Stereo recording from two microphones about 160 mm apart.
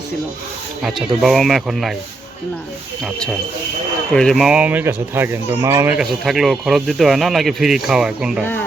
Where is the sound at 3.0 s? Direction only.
Centre (ahead or behind); by 5.9 s 15° right (ahead or behind).